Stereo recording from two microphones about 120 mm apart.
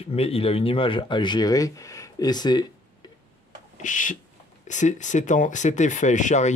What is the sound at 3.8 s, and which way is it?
Speech, 90° left.